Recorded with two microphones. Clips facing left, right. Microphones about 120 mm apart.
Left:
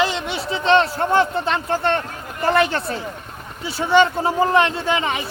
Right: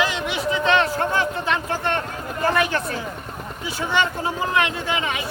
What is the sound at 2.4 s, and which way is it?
Speech, 30° left (ahead or behind).